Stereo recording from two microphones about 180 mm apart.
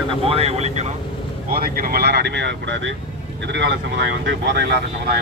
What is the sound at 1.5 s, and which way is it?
Speech, 55° right (ahead or behind).